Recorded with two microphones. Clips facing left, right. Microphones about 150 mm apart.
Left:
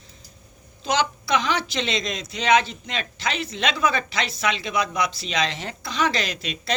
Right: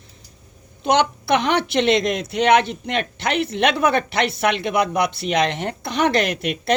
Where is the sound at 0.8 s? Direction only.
60° right (ahead or behind).